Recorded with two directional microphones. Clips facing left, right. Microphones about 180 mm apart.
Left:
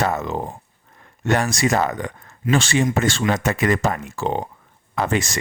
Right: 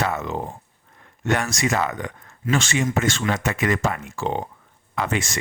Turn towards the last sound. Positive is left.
turn(degrees=35)  # may be behind; listen again after turning